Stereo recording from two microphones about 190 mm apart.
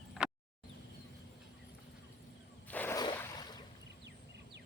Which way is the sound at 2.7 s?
10° left (ahead or behind).